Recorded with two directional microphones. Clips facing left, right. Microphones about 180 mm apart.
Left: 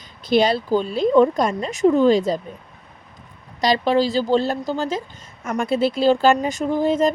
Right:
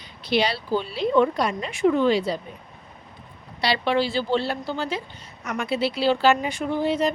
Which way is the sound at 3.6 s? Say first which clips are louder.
Left 5 dB; 40° left (ahead or behind).